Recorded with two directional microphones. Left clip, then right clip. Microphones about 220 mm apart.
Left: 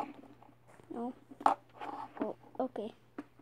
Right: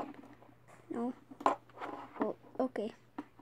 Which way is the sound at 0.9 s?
10° right (ahead or behind).